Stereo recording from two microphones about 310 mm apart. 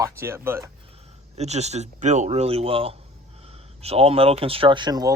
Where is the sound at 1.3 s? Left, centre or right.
Right.